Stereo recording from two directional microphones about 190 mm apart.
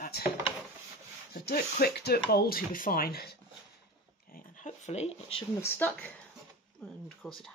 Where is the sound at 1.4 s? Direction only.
55° left (ahead or behind).